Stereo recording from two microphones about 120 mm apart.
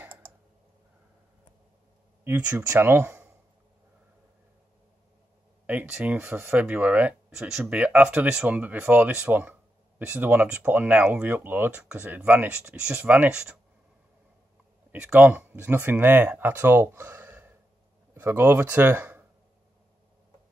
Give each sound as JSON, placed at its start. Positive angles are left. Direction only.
{"t": 2.2, "sound": "speech", "side_deg": -15}
{"t": 5.7, "sound": "speech", "side_deg": -10}
{"t": 14.9, "sound": "speech", "side_deg": -10}